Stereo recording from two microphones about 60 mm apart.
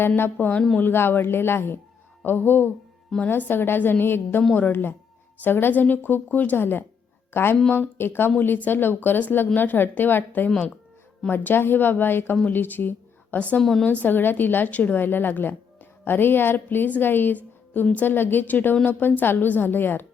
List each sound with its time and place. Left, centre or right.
0.2 s a woman's voice: left
13.6 s a woman's voice: centre
13.8 s a woman's voice: left